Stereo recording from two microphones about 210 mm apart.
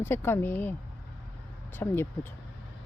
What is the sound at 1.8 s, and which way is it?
Speech, 10° left (ahead or behind).